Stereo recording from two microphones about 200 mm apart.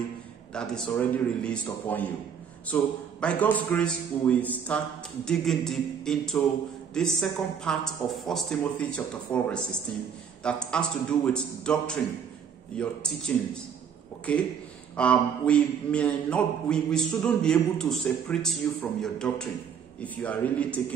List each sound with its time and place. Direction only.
0.5 s a man's voice: 5° left (ahead or behind)